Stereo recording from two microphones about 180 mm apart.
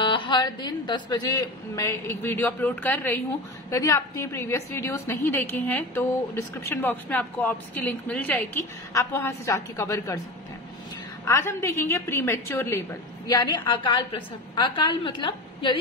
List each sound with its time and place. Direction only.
0.0 s speech: 30° left (ahead or behind)
11.2 s a woman's voice: 15° left (ahead or behind)